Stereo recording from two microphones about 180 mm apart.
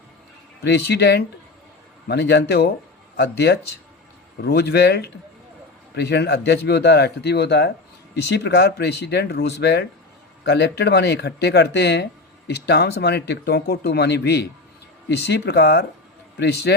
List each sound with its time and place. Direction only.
0.6 s speech: 70° left (ahead or behind)